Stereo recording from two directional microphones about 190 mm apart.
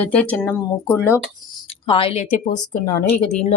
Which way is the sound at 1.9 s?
30° left (ahead or behind).